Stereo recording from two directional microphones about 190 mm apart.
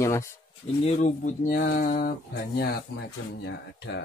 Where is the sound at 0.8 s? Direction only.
35° left (ahead or behind).